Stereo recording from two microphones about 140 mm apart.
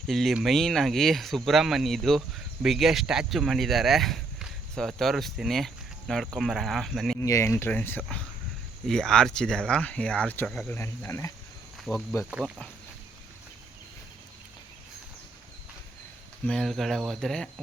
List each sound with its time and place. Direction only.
0.1 s speech: centre (ahead or behind)
7.2 s speech: 20° left (ahead or behind); by 10.8 s 5° left (ahead or behind)
10.8 s speech: 20° left (ahead or behind)
11.9 s speech: 5° right (ahead or behind)
16.5 s speech: 5° left (ahead or behind)